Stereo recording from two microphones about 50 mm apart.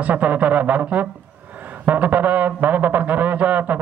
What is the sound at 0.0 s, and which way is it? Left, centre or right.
Speech, right.